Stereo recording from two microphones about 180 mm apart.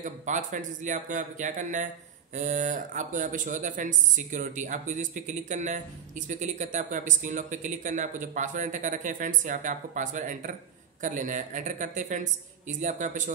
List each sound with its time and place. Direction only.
0.0 s speech: 45° right (ahead or behind)